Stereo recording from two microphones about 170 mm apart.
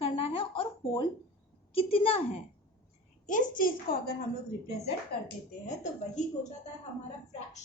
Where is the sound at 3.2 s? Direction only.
50° left (ahead or behind).